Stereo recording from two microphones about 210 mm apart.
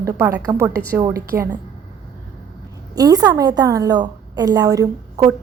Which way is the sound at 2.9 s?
15° right (ahead or behind).